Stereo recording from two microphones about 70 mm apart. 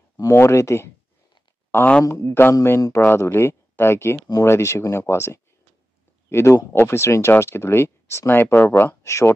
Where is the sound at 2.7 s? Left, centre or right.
Left.